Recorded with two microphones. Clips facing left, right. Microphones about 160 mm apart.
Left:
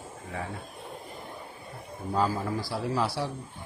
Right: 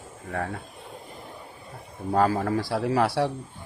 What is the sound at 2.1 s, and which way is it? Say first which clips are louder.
A man's voice: right 5 dB; 65° right (ahead or behind).